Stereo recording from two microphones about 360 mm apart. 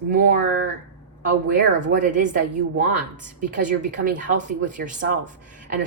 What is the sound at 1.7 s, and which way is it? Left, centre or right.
Speech, right.